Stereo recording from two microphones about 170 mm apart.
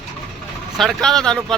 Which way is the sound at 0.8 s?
Centre (ahead or behind).